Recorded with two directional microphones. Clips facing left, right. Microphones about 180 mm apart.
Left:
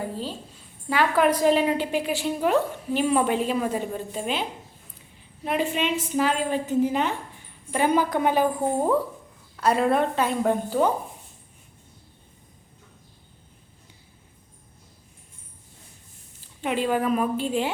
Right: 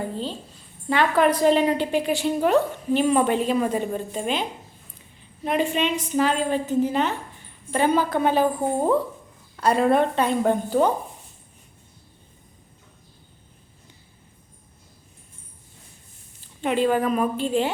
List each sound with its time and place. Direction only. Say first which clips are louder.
0.1 s a sound: right 2 dB; 5° left (ahead or behind)
0.9 s a woman's voice: right 1 dB; 5° left (ahead or behind)
5.5 s a woman's voice: right 2 dB; 5° left (ahead or behind)
9.6 s a woman's voice: right 2 dB; centre (ahead or behind)
16.6 s a woman's voice: right 3 dB; 5° left (ahead or behind)